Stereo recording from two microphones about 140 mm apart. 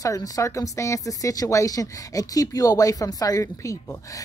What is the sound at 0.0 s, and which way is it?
A child's voice, 25° left (ahead or behind).